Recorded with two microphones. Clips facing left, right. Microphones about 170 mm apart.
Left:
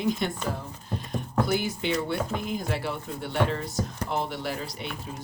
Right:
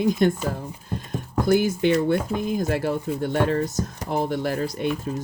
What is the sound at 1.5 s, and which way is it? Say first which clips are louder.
Speech: right 8 dB; 50° right (ahead or behind).